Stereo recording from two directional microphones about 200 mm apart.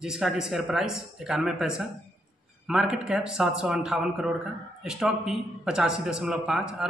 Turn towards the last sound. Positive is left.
turn(degrees=-5)  # may be behind; listen again after turning